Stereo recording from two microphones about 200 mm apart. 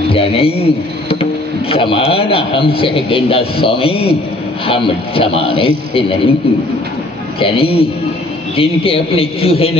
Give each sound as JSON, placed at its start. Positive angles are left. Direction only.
{"t": 0.1, "sound": "a man's voice", "side_deg": 30}
{"t": 7.3, "sound": "a man's voice", "side_deg": 30}